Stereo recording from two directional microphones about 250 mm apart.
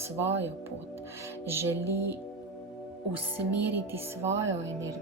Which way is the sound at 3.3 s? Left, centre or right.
Centre.